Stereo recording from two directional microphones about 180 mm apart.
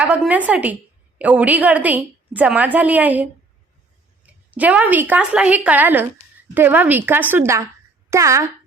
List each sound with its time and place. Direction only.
0.0 s a woman's voice: 10° right (ahead or behind)